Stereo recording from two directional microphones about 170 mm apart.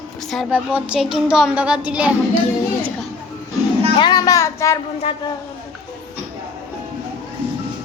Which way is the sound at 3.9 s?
25° left (ahead or behind).